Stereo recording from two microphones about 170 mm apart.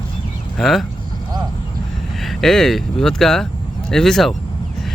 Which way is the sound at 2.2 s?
Centre (ahead or behind).